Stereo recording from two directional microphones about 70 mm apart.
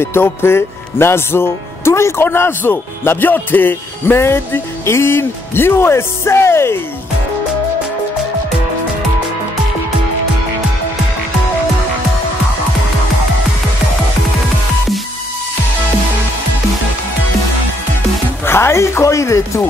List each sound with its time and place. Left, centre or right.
0.0 s speech: left
18.4 s music: left